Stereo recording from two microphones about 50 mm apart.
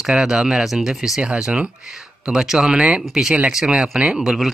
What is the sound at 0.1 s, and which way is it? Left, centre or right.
Speech, centre.